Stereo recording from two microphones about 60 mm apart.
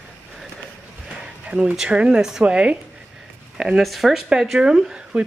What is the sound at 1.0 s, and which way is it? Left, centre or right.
Speech, centre.